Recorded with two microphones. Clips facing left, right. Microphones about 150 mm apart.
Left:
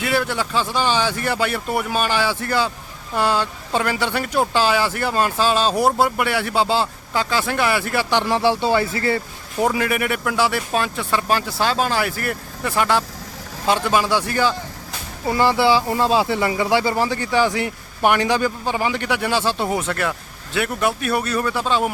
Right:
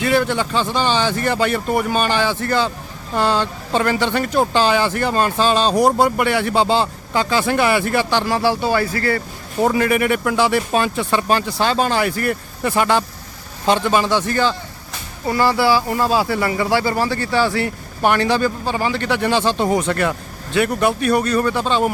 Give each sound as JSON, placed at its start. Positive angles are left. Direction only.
{"t": 0.0, "sound": "speech", "side_deg": 5}
{"t": 8.1, "sound": "speech", "side_deg": 20}
{"t": 9.6, "sound": "speech", "side_deg": 5}